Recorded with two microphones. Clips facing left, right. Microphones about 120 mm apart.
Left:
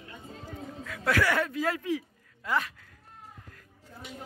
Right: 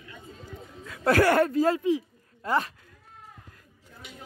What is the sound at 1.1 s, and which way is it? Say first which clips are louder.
Speech: right 6 dB; 45° right (ahead or behind).